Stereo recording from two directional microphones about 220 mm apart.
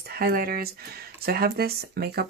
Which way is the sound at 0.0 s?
45° right (ahead or behind).